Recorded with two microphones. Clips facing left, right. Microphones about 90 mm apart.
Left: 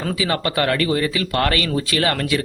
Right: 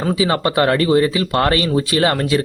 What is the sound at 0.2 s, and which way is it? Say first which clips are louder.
Speech: right 4 dB; 25° right (ahead or behind).